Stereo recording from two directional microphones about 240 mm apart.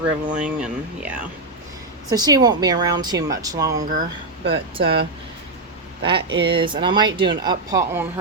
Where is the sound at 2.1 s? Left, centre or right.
Centre.